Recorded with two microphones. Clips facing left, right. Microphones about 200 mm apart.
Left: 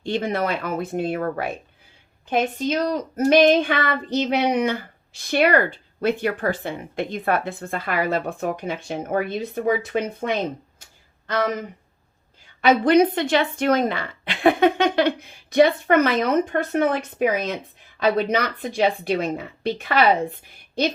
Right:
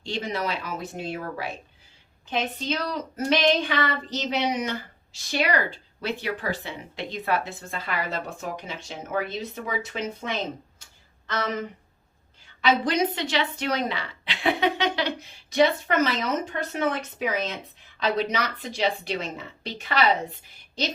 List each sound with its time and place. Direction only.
0.0 s a woman's voice: 55° left (ahead or behind)
12.6 s a woman's voice: 55° left (ahead or behind)